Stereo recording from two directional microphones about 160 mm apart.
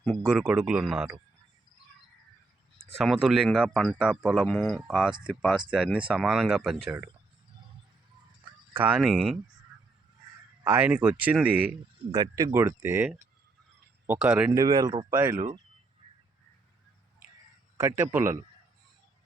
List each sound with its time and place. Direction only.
0.3 s speech: 5° right (ahead or behind)
3.0 s speech: centre (ahead or behind)
8.7 s speech: 10° right (ahead or behind)
9.0 s speech: centre (ahead or behind)
10.6 s speech: 15° right (ahead or behind)
12.1 s speech: 25° right (ahead or behind)
12.5 s speech: 15° right (ahead or behind)
14.5 s speech: 25° right (ahead or behind)
17.7 s speech: 15° right (ahead or behind)